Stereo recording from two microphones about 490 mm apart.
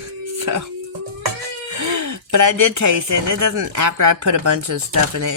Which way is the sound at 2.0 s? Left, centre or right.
Right.